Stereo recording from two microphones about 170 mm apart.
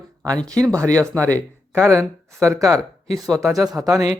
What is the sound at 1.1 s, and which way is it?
Speech, 10° left (ahead or behind).